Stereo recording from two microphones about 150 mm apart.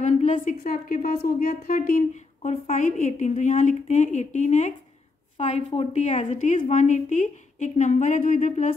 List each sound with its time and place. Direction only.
0.0 s a woman's voice: 50° left (ahead or behind)